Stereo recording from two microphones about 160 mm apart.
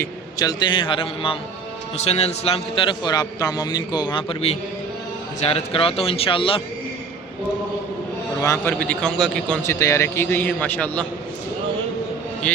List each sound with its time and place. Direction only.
0.0 s a man's voice: 25° left (ahead or behind)
8.4 s a man's voice: 15° left (ahead or behind)
9.6 s a man's voice: 20° left (ahead or behind)